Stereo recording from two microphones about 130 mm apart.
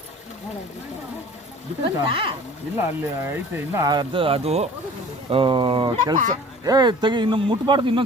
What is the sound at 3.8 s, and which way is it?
Speech, 30° right (ahead or behind).